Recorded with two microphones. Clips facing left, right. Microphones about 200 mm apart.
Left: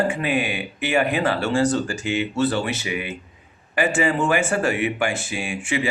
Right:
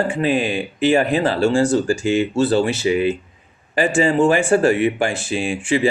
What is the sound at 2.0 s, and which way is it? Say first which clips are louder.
Speech: right 6 dB; 20° left (ahead or behind).